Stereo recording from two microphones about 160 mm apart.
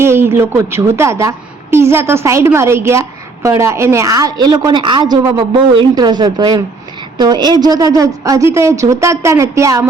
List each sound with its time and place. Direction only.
0.0 s a woman's voice: 15° right (ahead or behind)